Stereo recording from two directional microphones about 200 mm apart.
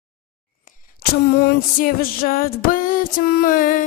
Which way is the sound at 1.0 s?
50° left (ahead or behind).